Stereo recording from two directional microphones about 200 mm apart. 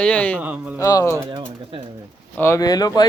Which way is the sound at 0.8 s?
15° left (ahead or behind).